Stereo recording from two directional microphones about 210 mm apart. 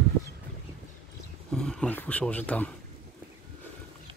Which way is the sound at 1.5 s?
5° left (ahead or behind).